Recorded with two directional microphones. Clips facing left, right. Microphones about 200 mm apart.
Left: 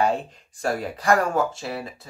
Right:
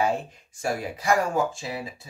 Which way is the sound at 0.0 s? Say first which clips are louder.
Left 2 dB; 10° right (ahead or behind).